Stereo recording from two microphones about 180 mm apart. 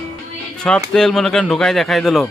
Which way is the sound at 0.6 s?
5° left (ahead or behind).